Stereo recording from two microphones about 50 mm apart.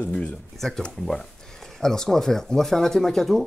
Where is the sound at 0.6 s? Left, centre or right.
Centre.